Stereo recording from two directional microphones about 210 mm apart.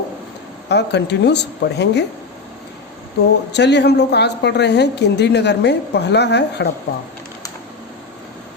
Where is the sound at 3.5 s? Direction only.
55° left (ahead or behind).